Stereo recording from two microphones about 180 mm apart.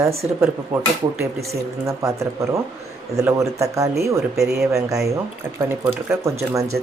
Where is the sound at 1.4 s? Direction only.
15° right (ahead or behind).